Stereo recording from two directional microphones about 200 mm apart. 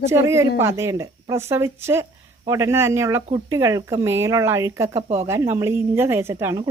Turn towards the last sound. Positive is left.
turn(degrees=-15)  # may be behind; listen again after turning